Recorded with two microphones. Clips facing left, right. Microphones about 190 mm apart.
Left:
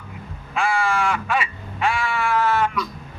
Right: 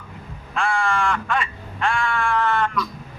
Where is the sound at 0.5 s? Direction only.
5° left (ahead or behind).